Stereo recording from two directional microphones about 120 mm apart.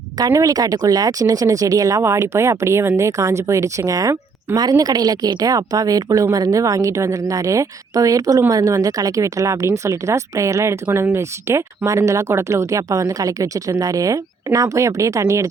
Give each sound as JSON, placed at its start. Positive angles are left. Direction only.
{"t": 0.2, "sound": "a woman's voice", "side_deg": -30}